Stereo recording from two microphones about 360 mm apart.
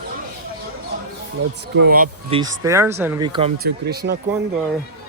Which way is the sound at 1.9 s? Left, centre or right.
Right.